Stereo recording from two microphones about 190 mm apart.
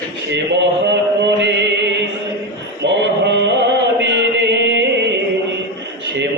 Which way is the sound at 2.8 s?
65° right (ahead or behind).